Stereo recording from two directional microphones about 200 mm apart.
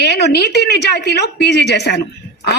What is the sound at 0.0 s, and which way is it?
A woman's voice, 55° left (ahead or behind).